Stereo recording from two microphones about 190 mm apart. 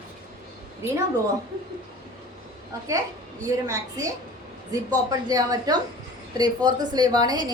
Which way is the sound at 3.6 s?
15° right (ahead or behind).